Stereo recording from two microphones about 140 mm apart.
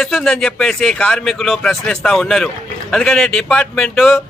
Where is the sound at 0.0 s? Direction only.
5° left (ahead or behind).